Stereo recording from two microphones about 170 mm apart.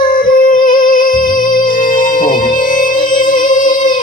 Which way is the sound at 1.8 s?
50° left (ahead or behind).